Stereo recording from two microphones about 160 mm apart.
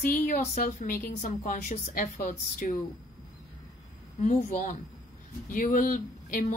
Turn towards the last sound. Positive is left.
turn(degrees=55)  # may be behind; listen again after turning